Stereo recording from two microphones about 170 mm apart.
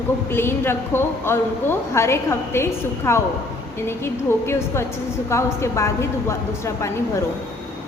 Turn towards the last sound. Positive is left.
turn(degrees=15)  # may be behind; listen again after turning